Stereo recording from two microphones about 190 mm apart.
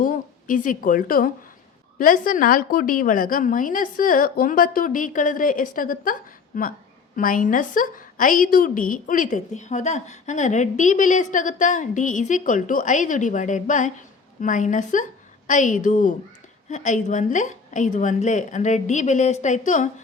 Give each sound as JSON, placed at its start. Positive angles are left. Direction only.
{"t": 0.0, "sound": "a woman's voice", "side_deg": 45}